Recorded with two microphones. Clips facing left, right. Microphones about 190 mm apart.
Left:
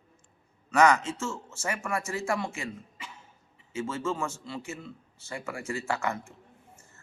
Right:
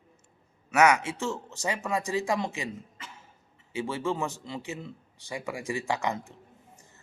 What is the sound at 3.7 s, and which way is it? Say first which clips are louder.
A man's voice: right 1 dB; 15° right (ahead or behind).